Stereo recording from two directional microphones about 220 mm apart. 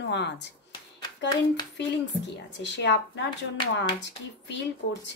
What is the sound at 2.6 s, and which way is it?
Speech, 55° left (ahead or behind).